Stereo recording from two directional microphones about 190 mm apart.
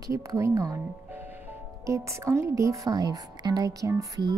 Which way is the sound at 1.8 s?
15° right (ahead or behind).